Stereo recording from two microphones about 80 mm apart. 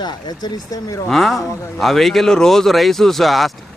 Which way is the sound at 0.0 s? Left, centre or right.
Left.